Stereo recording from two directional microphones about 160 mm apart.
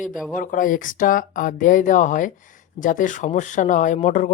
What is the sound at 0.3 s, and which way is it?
Speech, 55° left (ahead or behind).